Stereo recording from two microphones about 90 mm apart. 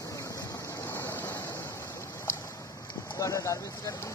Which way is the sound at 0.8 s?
25° left (ahead or behind).